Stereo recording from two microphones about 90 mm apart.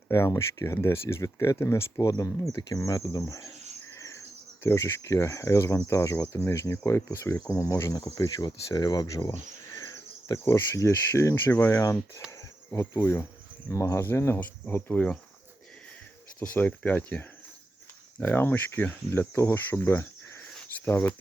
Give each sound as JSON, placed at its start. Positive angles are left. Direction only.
{"t": 0.1, "sound": "speech", "side_deg": 30}
{"t": 4.6, "sound": "speech", "side_deg": 30}
{"t": 16.4, "sound": "speech", "side_deg": 15}